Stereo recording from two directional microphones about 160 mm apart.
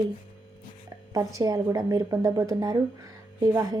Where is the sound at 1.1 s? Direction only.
20° right (ahead or behind).